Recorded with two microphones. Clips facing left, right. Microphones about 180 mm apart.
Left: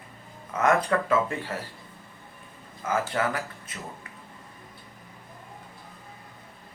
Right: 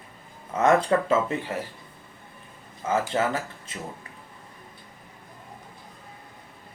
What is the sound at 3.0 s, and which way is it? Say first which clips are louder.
Speech: right 2 dB; 25° right (ahead or behind).